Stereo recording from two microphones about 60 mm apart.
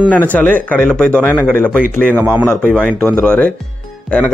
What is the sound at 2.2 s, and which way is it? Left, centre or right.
Speech, right.